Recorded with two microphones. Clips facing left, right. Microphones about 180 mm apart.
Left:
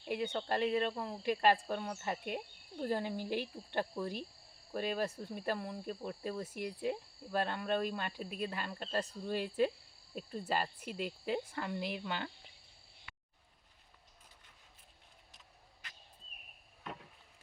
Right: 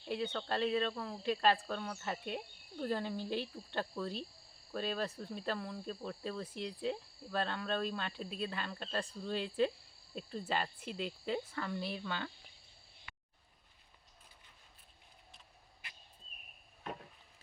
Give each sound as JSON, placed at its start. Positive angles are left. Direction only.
{"t": 0.0, "sound": "cricket", "side_deg": 10}
{"t": 10.2, "sound": "speech", "side_deg": 5}
{"t": 11.5, "sound": "cricket", "side_deg": 20}
{"t": 13.1, "sound": "a sound", "side_deg": -50}